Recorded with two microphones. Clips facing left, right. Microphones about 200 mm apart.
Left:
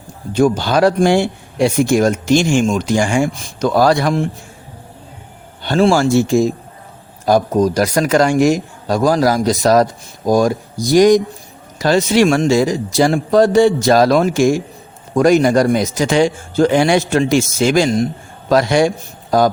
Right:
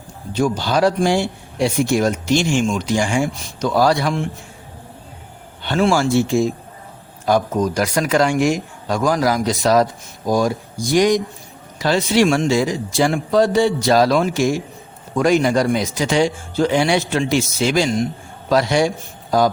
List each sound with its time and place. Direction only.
0.3 s speech: 50° left (ahead or behind)
5.6 s a man's voice: 35° left (ahead or behind)
13.4 s speech: 50° left (ahead or behind)